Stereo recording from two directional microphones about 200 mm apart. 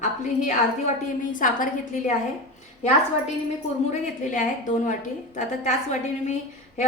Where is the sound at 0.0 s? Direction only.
40° left (ahead or behind).